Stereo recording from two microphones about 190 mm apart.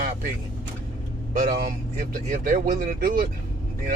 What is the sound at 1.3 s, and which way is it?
Speech, 45° right (ahead or behind).